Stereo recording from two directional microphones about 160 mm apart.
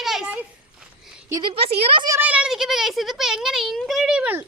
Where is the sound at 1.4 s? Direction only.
35° right (ahead or behind).